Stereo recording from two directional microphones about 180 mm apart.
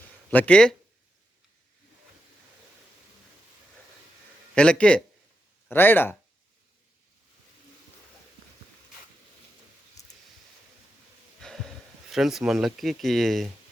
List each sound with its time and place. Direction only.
0.3 s speech: 5° left (ahead or behind)
4.5 s speech: 5° left (ahead or behind)
11.3 s a sound: centre (ahead or behind)
12.1 s speech: centre (ahead or behind)